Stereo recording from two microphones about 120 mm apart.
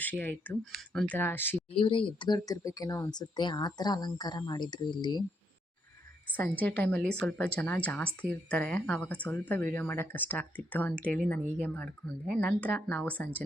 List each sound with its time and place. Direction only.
0.0 s speech: 15° left (ahead or behind)
0.6 s speech: centre (ahead or behind)
1.0 s speech: 15° left (ahead or behind)
1.7 s speech: 45° left (ahead or behind)
6.6 s speech: 10° left (ahead or behind)